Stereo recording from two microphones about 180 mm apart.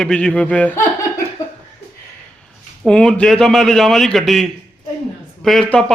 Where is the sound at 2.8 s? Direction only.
5° left (ahead or behind).